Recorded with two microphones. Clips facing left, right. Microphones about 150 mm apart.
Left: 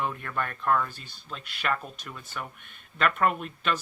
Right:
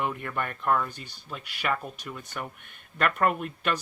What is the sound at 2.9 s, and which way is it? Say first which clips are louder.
Speech: even; 50° right (ahead or behind).